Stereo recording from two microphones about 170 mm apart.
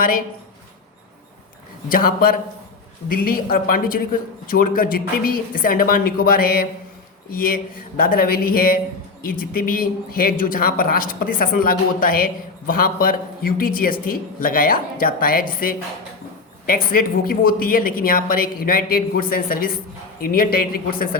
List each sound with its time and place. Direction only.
1.9 s speech: 55° left (ahead or behind)